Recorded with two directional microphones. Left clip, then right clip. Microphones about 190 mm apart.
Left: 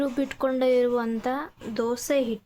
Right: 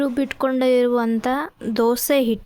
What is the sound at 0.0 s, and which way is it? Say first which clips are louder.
A woman's voice: right 5 dB; 50° right (ahead or behind).